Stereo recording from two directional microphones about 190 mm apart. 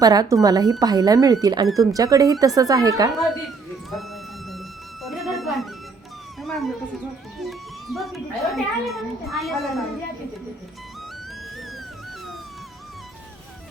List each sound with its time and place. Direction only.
0.0 s speech: 20° right (ahead or behind)
5.0 s music: centre (ahead or behind)
6.4 s cat: centre (ahead or behind)
7.4 s a child's voice: centre (ahead or behind)